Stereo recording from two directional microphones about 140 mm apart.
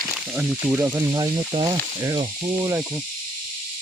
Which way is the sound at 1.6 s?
35° right (ahead or behind).